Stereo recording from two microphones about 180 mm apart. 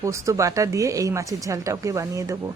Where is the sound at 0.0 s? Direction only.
15° right (ahead or behind).